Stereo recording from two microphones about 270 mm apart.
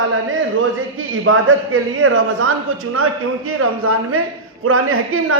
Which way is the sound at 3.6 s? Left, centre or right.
Right.